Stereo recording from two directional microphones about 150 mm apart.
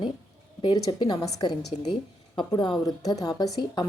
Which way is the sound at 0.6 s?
30° left (ahead or behind).